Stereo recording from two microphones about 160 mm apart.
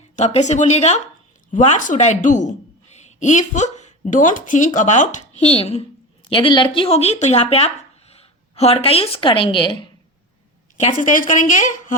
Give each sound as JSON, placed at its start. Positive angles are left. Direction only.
{"t": 0.2, "sound": "speech", "side_deg": 45}
{"t": 10.9, "sound": "speech", "side_deg": 55}